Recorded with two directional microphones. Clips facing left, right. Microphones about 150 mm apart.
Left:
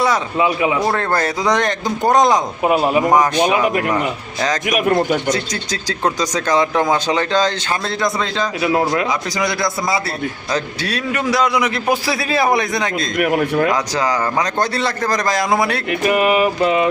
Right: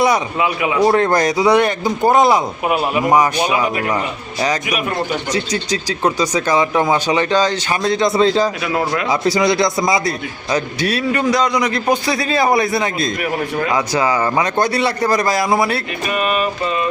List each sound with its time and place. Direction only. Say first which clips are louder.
0.0 s a man's voice: right 1 dB; 15° right (ahead or behind)
0.4 s a man's voice: left 2 dB; 25° left (ahead or behind)
0.9 s speech: right 4 dB; 15° right (ahead or behind)
2.6 s a man's voice: left 4 dB; 25° left (ahead or behind)
3.1 s speech: right 3 dB; 10° right (ahead or behind)
5.3 s speech: right 2 dB; 10° right (ahead or behind)
8.0 s a man's voice: right 7 dB; 35° right (ahead or behind)
10.5 s speech: right 5 dB; 10° right (ahead or behind)
11.1 s a man's voice: left 1 dB; centre (ahead or behind)
13.1 s speech: left 4 dB; 60° left (ahead or behind)
13.7 s speech: right 2 dB; 10° right (ahead or behind)
16.0 s a sound: left 4 dB; 70° left (ahead or behind)